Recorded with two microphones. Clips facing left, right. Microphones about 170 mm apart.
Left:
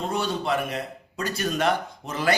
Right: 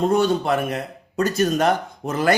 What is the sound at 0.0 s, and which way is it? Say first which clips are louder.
A man's voice: right 8 dB; 45° right (ahead or behind).